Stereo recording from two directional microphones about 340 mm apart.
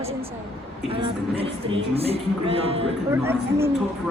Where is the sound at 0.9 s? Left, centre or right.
Centre.